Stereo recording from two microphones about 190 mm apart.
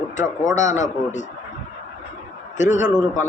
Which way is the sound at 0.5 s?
40° left (ahead or behind).